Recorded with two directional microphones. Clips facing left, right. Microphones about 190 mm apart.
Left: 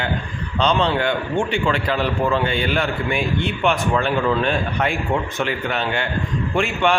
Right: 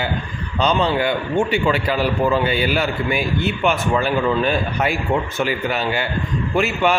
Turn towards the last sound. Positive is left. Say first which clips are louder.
# right 1 dB
turn(degrees=-5)  # may be behind; listen again after turning